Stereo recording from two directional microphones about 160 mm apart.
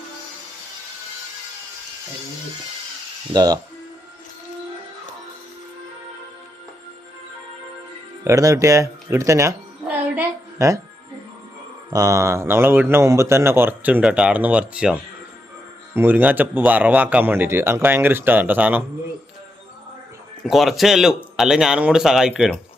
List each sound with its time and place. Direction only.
3.3 s speech: 25° right (ahead or behind)
8.2 s speech: 20° right (ahead or behind)
9.8 s a sound: 10° right (ahead or behind)
11.9 s speech: 20° right (ahead or behind)
16.0 s speech: 10° right (ahead or behind)
20.4 s speech: centre (ahead or behind)